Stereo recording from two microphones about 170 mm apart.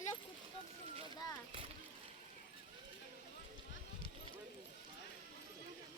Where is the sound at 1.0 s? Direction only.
30° right (ahead or behind).